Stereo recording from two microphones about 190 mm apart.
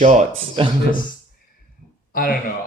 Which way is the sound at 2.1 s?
50° left (ahead or behind).